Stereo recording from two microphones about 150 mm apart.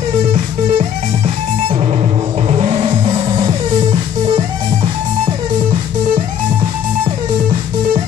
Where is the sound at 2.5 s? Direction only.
45° right (ahead or behind).